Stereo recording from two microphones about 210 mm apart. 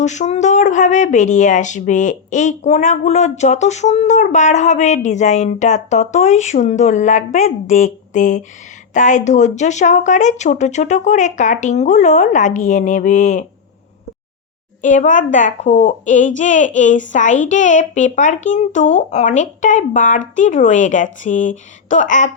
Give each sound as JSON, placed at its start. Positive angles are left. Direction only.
{"t": 0.0, "sound": "speech", "side_deg": 35}
{"t": 14.8, "sound": "speech", "side_deg": 35}